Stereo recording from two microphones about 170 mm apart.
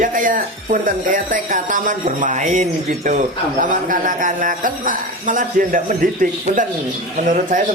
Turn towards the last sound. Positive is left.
turn(degrees=-50)  # may be behind; listen again after turning